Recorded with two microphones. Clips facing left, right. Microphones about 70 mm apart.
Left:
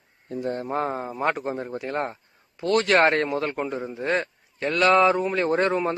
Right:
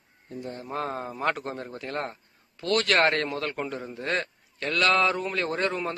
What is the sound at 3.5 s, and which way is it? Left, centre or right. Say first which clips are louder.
Speech: left 4 dB; centre.